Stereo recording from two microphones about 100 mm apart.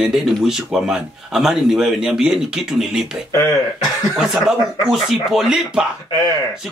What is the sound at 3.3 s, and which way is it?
Speech, 30° left (ahead or behind).